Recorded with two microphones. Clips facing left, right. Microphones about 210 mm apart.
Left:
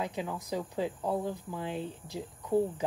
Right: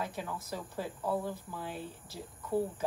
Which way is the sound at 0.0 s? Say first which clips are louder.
Left 3 dB; 20° left (ahead or behind).